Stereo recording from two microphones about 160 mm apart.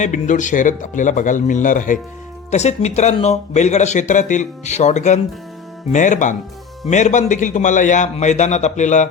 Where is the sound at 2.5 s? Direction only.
45° left (ahead or behind).